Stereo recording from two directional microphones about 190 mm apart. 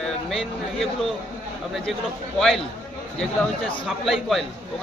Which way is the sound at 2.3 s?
Centre (ahead or behind).